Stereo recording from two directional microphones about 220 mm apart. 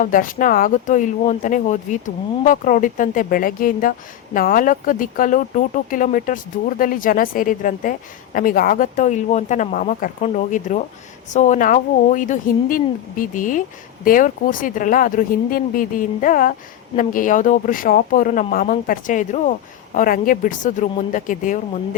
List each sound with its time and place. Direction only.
0.0 s speech: 40° left (ahead or behind)